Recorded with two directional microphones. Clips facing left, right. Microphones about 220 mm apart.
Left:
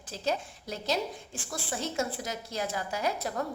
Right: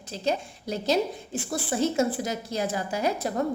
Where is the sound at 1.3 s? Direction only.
20° right (ahead or behind).